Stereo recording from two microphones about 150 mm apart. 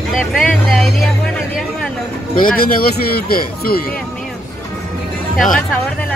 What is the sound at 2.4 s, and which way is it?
Speech, 75° left (ahead or behind).